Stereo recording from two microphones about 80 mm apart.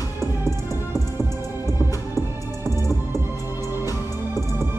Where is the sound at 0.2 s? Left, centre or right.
Right.